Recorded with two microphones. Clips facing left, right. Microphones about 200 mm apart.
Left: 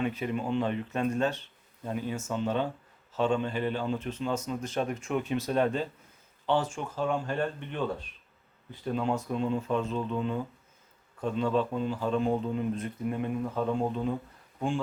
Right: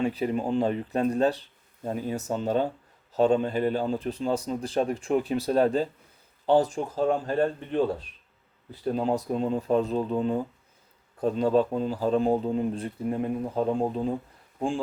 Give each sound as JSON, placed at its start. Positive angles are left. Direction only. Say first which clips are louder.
{"t": 0.0, "sound": "a man's voice", "louder": "right 4 dB", "side_deg": -35}